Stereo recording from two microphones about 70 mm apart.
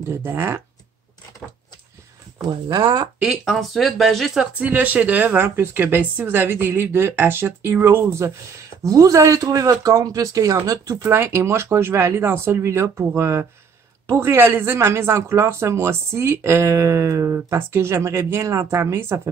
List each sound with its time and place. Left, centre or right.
0.2 s speech: right
2.7 s speech: right
3.3 s speech: centre
4.6 s speech: right
8.8 s speech: right
11.1 s speech: right